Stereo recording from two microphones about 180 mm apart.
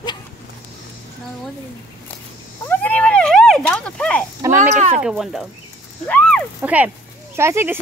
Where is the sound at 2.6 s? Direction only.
10° left (ahead or behind).